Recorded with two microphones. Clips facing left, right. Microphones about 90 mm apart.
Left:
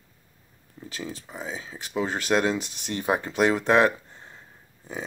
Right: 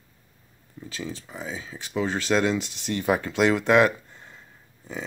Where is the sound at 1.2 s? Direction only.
20° left (ahead or behind).